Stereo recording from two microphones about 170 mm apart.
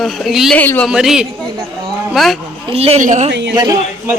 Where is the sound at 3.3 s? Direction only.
90° right.